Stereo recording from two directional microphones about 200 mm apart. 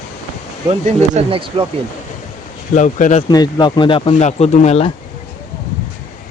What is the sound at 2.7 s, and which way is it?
Speech, 35° left (ahead or behind).